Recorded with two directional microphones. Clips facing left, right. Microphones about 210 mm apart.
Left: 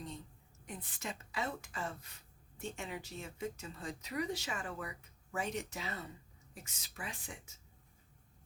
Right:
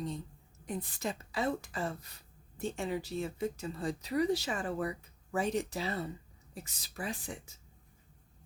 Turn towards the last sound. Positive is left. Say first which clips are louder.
# right 8 dB
turn(degrees=-35)  # may be behind; listen again after turning